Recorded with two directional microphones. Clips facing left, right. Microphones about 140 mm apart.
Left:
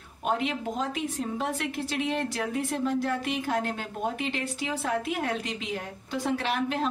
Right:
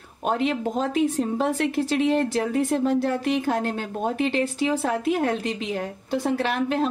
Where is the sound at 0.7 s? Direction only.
40° right (ahead or behind).